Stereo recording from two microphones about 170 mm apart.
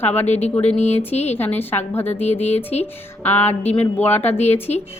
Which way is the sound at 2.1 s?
40° left (ahead or behind).